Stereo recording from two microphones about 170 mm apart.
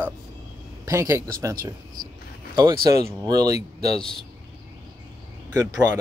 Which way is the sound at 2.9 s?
20° right (ahead or behind).